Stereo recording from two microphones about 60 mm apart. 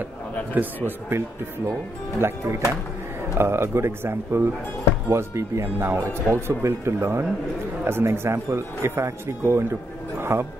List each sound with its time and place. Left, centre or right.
0.6 s a man's voice: right
2.1 s speech: right